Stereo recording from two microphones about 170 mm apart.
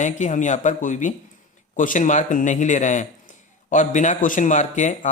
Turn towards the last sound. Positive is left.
turn(degrees=45)  # may be behind; listen again after turning